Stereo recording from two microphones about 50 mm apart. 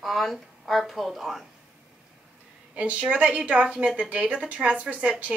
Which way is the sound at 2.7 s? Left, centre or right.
Right.